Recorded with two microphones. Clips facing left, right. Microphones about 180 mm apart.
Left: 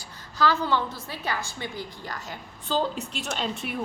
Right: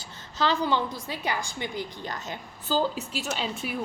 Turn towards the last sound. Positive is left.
turn(degrees=0)  # may be behind; listen again after turning